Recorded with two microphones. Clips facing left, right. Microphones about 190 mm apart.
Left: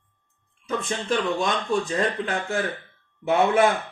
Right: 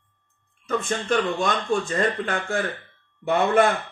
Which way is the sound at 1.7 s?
50° right (ahead or behind).